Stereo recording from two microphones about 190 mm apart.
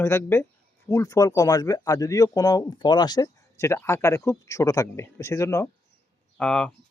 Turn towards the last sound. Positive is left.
turn(degrees=5)  # may be behind; listen again after turning